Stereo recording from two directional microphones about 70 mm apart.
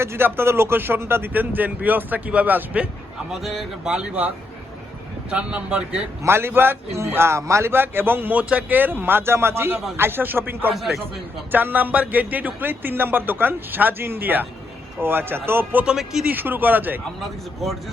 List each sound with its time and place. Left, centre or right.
0.0 s speech: right
3.4 s a man's voice: centre
3.8 s speech: centre
5.3 s speech: centre
6.2 s a man's voice: right
7.7 s a man's voice: right
10.8 s a man's voice: centre
11.5 s a man's voice: right
17.6 s a man's voice: centre